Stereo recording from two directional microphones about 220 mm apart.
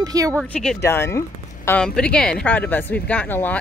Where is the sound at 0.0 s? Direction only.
15° right (ahead or behind).